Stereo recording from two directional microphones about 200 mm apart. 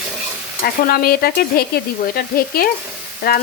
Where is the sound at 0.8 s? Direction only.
50° left (ahead or behind).